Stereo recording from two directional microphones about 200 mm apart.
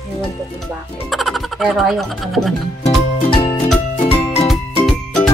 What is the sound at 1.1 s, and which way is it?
Speech, centre (ahead or behind).